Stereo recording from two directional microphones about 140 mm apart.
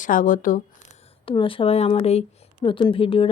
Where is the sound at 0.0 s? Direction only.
75° left (ahead or behind).